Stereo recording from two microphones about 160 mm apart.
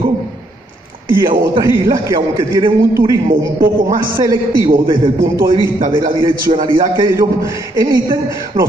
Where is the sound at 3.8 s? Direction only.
20° right (ahead or behind).